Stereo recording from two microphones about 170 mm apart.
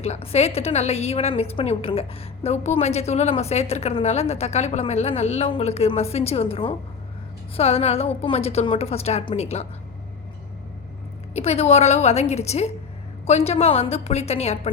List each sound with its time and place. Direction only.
0.0 s a woman's voice: 35° left (ahead or behind)
11.3 s a woman's voice: 40° left (ahead or behind)